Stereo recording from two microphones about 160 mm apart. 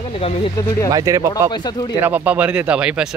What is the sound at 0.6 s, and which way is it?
Speech, 20° left (ahead or behind).